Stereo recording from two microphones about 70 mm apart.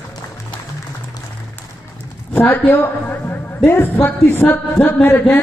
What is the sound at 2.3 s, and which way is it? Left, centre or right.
Speech, left.